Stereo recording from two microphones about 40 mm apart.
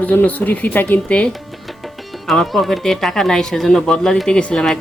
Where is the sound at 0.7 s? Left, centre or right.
Left.